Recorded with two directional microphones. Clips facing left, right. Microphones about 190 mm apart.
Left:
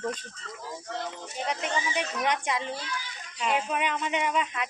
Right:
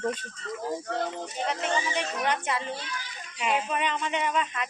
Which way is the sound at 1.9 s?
10° left (ahead or behind).